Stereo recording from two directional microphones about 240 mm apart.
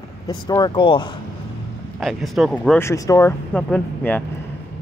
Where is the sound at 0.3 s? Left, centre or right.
Centre.